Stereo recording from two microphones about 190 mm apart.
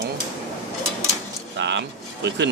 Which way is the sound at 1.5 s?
65° right (ahead or behind).